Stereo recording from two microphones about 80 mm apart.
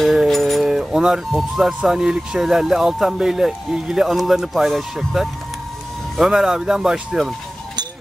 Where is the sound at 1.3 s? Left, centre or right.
Centre.